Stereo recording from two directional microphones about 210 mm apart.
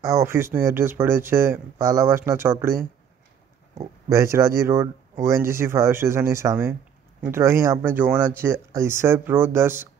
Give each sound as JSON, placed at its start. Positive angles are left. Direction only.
{"t": 0.0, "sound": "speech", "side_deg": -15}
{"t": 4.1, "sound": "speech", "side_deg": -15}